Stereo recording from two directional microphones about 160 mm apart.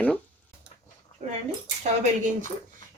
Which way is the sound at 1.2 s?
45° right (ahead or behind).